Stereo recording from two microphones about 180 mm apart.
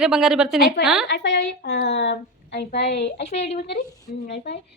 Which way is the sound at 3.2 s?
35° left (ahead or behind).